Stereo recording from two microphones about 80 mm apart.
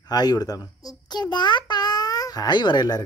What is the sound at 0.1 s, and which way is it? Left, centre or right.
A child's voice, left.